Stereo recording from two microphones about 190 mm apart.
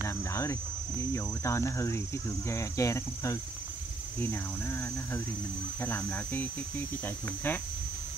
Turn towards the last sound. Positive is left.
turn(degrees=10)  # may be behind; listen again after turning